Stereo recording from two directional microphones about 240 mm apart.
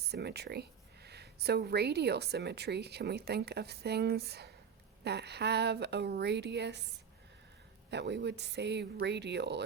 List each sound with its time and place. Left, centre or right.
0.1 s speech: right
7.9 s speech: right